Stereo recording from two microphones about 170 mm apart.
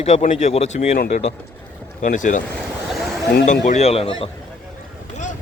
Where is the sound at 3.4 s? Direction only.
45° left (ahead or behind).